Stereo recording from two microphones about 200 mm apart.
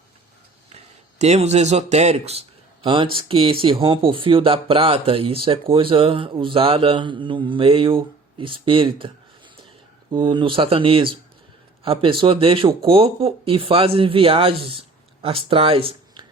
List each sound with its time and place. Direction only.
1.2 s speech: 35° right (ahead or behind)